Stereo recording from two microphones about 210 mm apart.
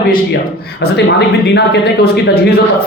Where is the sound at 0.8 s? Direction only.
45° left (ahead or behind).